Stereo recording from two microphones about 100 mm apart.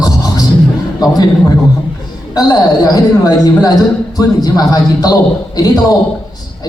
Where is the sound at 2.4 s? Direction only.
40° left (ahead or behind).